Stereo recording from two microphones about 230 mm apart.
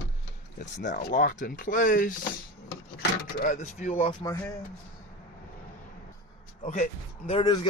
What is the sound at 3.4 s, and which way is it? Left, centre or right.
Speech, left.